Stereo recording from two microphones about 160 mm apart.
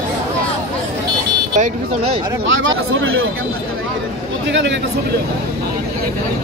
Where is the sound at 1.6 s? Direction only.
40° right (ahead or behind).